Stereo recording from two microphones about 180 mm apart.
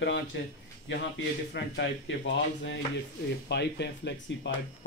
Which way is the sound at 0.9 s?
90° left.